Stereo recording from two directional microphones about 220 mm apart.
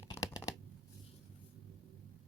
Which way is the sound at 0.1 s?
15° left (ahead or behind).